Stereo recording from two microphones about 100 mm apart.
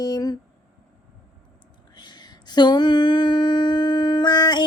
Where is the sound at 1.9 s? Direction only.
45° left (ahead or behind).